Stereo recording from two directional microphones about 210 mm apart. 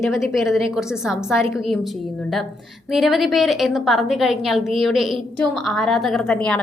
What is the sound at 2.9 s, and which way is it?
A woman's voice, centre (ahead or behind).